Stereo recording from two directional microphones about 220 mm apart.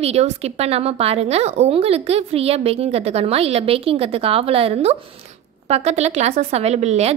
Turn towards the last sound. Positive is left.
turn(degrees=-30)  # may be behind; listen again after turning